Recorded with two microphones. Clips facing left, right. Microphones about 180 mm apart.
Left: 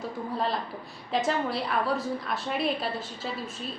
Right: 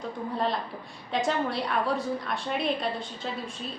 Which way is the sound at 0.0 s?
Centre (ahead or behind).